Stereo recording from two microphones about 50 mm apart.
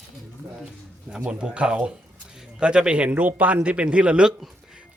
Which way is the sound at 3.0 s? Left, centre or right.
Right.